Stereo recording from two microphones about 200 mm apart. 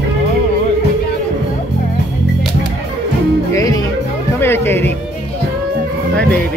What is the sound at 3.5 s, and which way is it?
Music, 15° left (ahead or behind).